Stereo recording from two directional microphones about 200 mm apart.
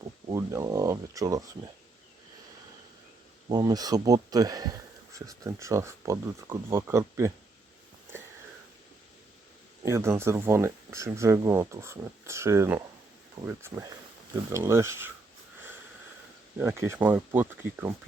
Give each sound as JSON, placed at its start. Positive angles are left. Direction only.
{"t": 0.3, "sound": "speech", "side_deg": -15}
{"t": 3.5, "sound": "speech", "side_deg": -20}
{"t": 9.8, "sound": "speech", "side_deg": -15}
{"t": 16.6, "sound": "speech", "side_deg": -10}